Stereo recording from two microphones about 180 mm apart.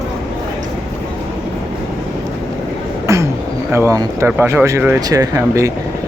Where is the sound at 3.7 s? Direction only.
15° right (ahead or behind).